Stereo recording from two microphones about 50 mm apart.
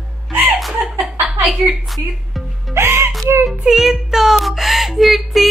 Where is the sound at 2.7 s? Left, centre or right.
Right.